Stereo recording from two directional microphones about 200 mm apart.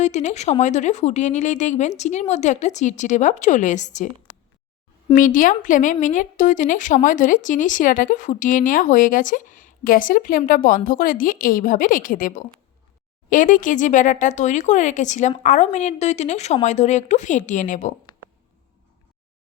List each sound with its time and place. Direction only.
0.0 s speech: 35° left (ahead or behind)
5.1 s speech: 40° left (ahead or behind)